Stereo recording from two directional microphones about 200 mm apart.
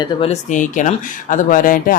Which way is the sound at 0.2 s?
35° left (ahead or behind).